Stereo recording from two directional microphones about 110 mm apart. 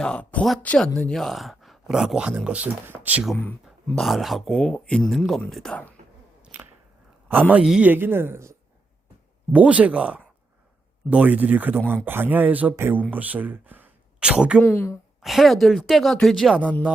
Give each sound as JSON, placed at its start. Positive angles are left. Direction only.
{"t": 0.0, "sound": "speech", "side_deg": 10}
{"t": 3.9, "sound": "speech", "side_deg": 0}
{"t": 6.4, "sound": "whip", "side_deg": -15}
{"t": 7.6, "sound": "speech", "side_deg": -5}
{"t": 7.9, "sound": "speech", "side_deg": -20}
{"t": 9.5, "sound": "speech", "side_deg": -10}
{"t": 14.6, "sound": "speech", "side_deg": 20}
{"t": 15.2, "sound": "speech", "side_deg": 0}